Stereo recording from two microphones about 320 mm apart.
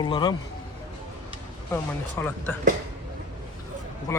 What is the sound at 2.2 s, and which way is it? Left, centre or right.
Speech, centre.